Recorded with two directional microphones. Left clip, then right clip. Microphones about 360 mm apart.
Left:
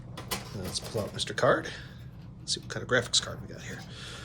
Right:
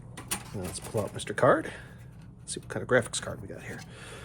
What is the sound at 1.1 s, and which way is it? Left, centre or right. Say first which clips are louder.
Speech: right 2 dB; centre.